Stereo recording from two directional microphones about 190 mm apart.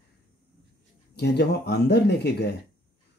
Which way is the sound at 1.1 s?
60° left (ahead or behind).